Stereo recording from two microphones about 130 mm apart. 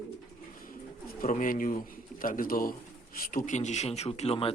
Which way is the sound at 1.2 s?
80° left.